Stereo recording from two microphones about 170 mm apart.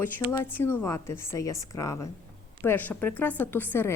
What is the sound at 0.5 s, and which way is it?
A woman's voice, 10° left (ahead or behind).